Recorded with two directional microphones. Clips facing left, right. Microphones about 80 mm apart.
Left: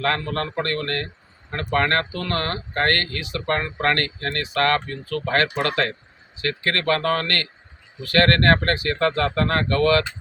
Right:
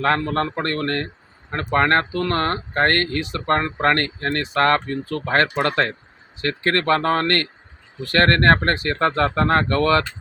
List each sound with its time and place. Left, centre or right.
0.0 s speech: right